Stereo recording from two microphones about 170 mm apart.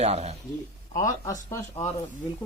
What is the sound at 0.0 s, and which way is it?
Speech, 40° right (ahead or behind).